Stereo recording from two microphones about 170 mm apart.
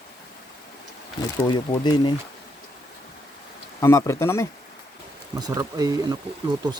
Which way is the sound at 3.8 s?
20° left (ahead or behind).